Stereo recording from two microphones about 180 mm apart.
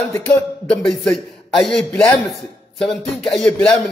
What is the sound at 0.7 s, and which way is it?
A man's voice, centre (ahead or behind).